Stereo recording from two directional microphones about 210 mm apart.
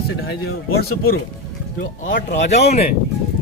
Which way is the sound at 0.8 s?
50° left (ahead or behind).